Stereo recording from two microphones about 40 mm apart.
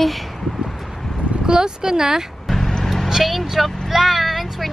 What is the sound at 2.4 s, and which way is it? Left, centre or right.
Vehicle, centre.